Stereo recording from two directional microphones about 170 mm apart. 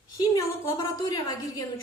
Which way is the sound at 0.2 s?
20° left (ahead or behind).